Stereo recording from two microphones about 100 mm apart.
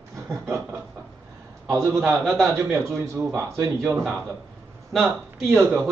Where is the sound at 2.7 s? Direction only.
30° right (ahead or behind).